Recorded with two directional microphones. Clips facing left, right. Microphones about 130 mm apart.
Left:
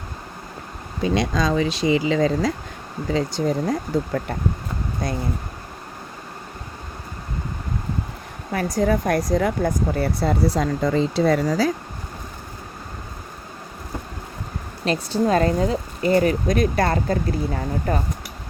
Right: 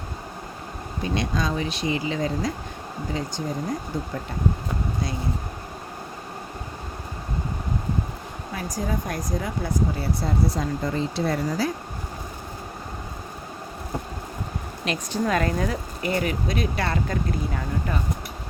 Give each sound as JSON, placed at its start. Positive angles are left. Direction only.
{"t": 1.1, "sound": "speech", "side_deg": 90}
{"t": 8.5, "sound": "speech", "side_deg": 65}
{"t": 9.6, "sound": "speech", "side_deg": 60}
{"t": 14.8, "sound": "speech", "side_deg": 30}